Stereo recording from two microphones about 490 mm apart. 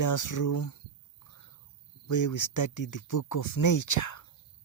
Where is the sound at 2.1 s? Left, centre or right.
Left.